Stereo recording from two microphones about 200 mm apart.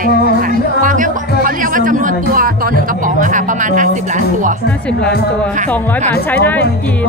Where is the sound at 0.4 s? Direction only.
45° right (ahead or behind).